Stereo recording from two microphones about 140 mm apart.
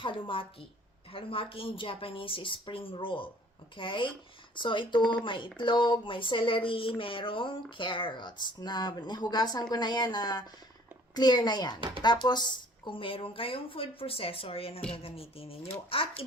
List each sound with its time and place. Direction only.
0.0 s a woman's voice: 35° left (ahead or behind)